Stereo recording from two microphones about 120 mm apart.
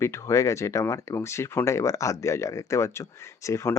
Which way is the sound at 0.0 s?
25° left (ahead or behind).